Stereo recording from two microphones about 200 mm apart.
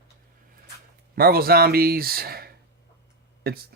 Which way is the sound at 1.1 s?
50° right (ahead or behind).